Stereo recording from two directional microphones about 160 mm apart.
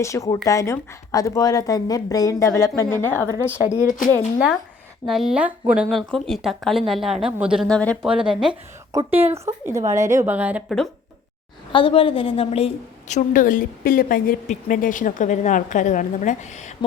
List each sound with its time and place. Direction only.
0.0 s a woman's voice: 20° left (ahead or behind)
3.8 s speech: 55° left (ahead or behind)
5.0 s speech: centre (ahead or behind)
7.7 s speech: 5° left (ahead or behind)
8.0 s speech: 5° right (ahead or behind)
8.9 s a woman's voice: 15° right (ahead or behind)
11.7 s a woman's voice: 35° left (ahead or behind)